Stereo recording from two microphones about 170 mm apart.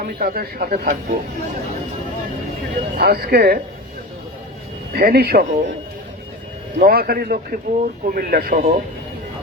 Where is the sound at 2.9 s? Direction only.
65° right (ahead or behind).